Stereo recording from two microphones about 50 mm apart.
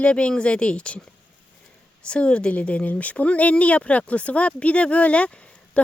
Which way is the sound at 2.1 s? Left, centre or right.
Left.